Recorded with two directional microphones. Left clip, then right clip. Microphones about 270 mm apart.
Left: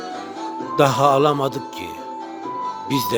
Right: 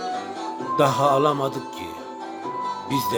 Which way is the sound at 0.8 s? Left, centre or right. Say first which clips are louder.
Left 3 dB; left.